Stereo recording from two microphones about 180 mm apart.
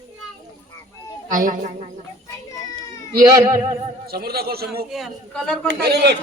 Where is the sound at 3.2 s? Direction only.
20° right (ahead or behind).